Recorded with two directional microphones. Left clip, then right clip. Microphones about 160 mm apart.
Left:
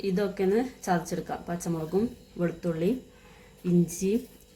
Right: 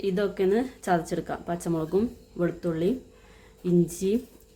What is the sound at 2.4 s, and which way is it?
Speech, 40° right (ahead or behind).